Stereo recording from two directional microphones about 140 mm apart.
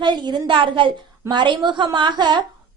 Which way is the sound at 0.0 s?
35° right (ahead or behind).